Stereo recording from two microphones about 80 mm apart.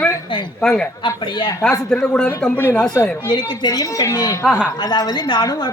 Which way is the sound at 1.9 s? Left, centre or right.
Centre.